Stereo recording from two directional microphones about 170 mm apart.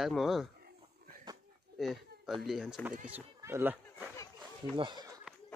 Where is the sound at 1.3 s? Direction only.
25° right (ahead or behind).